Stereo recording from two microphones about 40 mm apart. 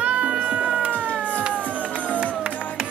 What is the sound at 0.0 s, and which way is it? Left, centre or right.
Cat, right.